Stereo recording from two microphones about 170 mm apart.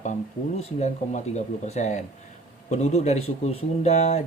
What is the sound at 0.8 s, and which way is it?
Speech, 40° left (ahead or behind).